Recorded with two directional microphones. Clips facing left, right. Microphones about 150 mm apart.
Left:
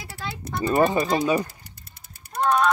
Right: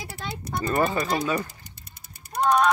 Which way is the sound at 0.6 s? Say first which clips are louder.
Left 4 dB; 25° left (ahead or behind).